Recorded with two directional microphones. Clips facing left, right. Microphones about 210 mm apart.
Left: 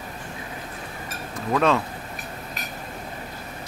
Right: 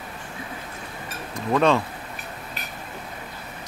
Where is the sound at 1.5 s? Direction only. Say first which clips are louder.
Right 1 dB; centre (ahead or behind).